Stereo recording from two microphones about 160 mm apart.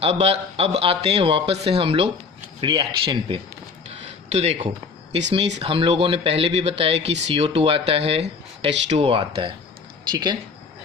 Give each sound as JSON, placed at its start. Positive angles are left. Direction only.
{"t": 0.0, "sound": "speech", "side_deg": -40}
{"t": 4.3, "sound": "speech", "side_deg": -45}